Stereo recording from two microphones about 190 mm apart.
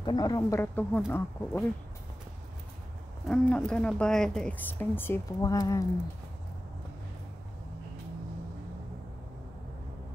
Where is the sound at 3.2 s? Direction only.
5° left (ahead or behind).